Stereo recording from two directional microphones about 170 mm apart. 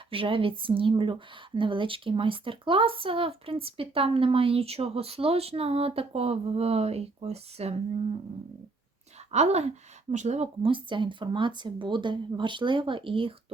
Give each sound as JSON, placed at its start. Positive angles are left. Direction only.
{"t": 0.1, "sound": "speech", "side_deg": -30}
{"t": 9.3, "sound": "speech", "side_deg": -40}